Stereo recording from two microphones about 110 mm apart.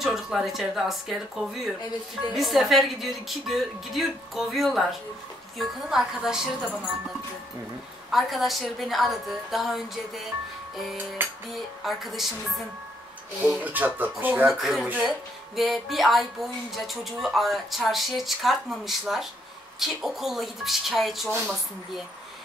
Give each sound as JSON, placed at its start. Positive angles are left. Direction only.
{"t": 0.0, "sound": "music", "side_deg": -5}
{"t": 8.1, "sound": "music", "side_deg": 0}
{"t": 11.5, "sound": "music", "side_deg": 0}
{"t": 13.4, "sound": "speech", "side_deg": -15}
{"t": 14.5, "sound": "music", "side_deg": -5}